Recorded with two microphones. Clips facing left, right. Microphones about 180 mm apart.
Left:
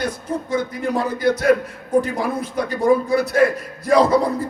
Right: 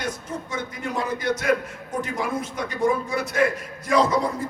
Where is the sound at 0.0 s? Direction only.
35° left (ahead or behind).